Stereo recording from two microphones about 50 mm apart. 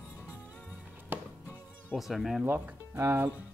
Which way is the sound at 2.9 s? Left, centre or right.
Right.